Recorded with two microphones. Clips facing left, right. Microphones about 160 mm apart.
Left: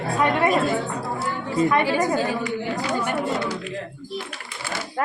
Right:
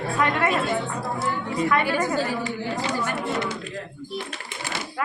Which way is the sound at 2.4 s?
25° right (ahead or behind).